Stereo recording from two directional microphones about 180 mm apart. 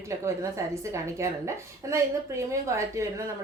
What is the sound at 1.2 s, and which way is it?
Speech, 15° right (ahead or behind).